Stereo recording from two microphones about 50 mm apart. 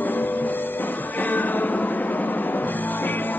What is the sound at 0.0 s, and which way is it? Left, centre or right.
Music, left.